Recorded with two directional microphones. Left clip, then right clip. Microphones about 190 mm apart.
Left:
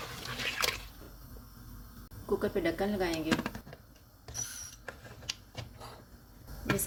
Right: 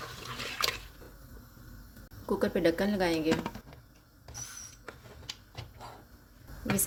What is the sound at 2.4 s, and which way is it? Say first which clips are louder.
Speech: right 6 dB; 45° right (ahead or behind).